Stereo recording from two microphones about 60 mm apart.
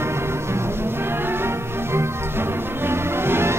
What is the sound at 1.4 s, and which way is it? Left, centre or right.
Music, right.